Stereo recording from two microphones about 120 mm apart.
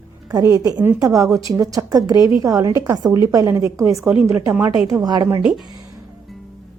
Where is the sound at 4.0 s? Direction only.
10° right (ahead or behind).